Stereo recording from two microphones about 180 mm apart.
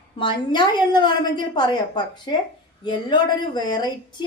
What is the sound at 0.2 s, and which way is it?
A woman's voice, 25° left (ahead or behind).